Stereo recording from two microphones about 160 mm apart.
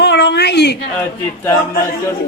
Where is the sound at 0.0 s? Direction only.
90° left.